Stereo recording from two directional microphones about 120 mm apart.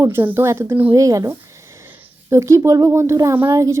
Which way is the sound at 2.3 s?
25° right (ahead or behind).